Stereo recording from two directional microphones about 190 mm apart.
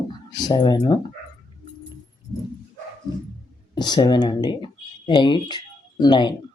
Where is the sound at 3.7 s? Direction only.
20° left (ahead or behind).